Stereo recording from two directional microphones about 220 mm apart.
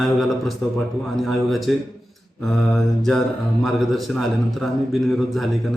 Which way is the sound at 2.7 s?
Centre (ahead or behind).